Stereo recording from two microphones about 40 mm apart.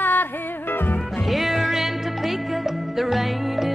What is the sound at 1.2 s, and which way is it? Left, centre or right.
Music, centre.